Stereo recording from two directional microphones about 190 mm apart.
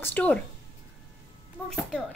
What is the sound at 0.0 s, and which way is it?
Speech, 5° left (ahead or behind).